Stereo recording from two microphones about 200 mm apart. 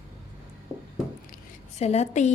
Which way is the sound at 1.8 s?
35° left (ahead or behind).